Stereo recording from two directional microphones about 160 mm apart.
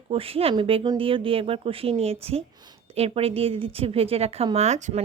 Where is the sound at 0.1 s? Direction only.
35° right (ahead or behind).